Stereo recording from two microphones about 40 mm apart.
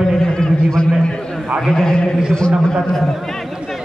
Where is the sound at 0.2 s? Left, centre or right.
Centre.